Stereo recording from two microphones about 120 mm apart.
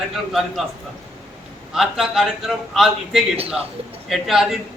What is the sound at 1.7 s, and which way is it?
A man's voice, 5° right (ahead or behind).